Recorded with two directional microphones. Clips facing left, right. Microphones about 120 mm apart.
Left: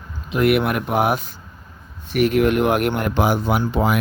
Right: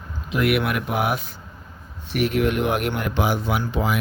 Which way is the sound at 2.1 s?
50° left (ahead or behind).